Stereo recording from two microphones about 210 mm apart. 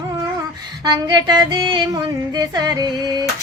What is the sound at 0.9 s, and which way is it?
Female singing, 20° right (ahead or behind).